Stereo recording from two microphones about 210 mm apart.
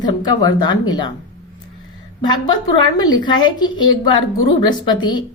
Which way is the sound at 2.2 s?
20° left (ahead or behind).